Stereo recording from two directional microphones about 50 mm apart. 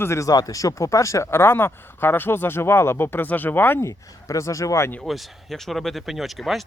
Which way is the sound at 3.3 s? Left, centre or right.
Left.